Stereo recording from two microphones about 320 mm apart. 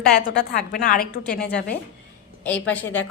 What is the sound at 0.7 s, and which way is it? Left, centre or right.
A woman's voice, left.